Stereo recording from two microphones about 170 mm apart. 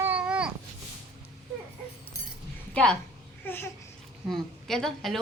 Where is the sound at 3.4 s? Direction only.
15° left (ahead or behind).